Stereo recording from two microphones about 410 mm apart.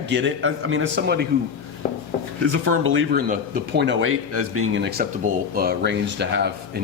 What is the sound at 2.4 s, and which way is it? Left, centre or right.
A man's voice, right.